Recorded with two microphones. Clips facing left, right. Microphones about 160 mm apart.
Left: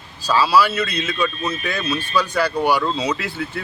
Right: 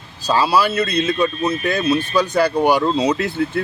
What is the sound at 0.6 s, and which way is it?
Speech, 35° right (ahead or behind).